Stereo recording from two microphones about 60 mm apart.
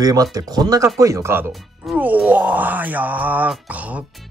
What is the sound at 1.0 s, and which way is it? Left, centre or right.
Speech, right.